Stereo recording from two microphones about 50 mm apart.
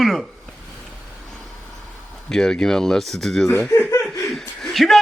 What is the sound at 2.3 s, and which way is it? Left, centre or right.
A man's voice, centre.